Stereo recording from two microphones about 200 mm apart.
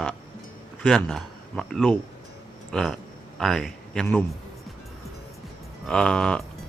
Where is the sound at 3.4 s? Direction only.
Centre (ahead or behind).